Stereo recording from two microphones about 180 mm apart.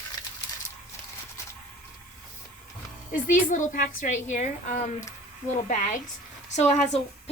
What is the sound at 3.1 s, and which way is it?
A woman's voice, 45° left (ahead or behind).